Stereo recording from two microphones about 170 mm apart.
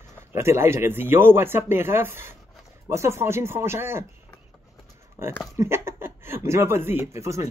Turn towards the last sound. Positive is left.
turn(degrees=-15)  # may be behind; listen again after turning